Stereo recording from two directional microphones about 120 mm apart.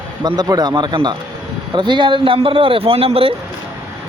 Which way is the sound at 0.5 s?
30° right (ahead or behind).